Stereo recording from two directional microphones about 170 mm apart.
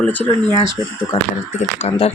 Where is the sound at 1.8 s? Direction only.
40° left (ahead or behind).